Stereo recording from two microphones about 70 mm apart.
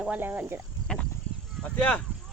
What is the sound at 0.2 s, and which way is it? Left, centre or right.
Speech, right.